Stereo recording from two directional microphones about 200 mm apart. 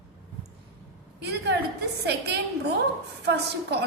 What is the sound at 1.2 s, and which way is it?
A woman's voice, 55° right (ahead or behind).